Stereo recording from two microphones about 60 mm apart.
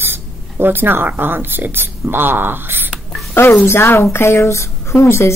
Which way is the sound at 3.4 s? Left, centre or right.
Left.